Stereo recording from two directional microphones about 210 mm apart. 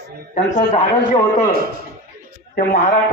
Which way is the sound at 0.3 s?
35° left (ahead or behind).